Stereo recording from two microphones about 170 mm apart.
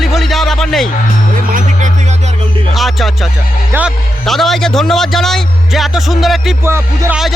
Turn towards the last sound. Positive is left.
turn(degrees=-15)  # may be behind; listen again after turning